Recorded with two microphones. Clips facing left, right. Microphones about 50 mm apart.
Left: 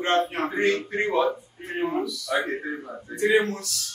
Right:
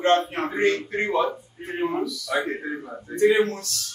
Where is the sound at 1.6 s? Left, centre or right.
Centre.